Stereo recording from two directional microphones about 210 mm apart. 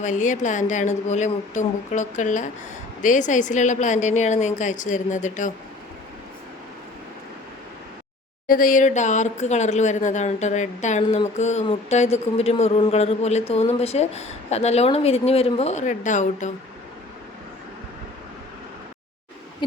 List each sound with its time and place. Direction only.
0.0 s a woman's voice: 35° left (ahead or behind)
8.4 s a woman's voice: 40° left (ahead or behind)